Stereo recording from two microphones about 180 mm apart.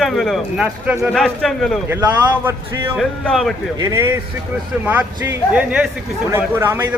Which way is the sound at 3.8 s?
20° right (ahead or behind).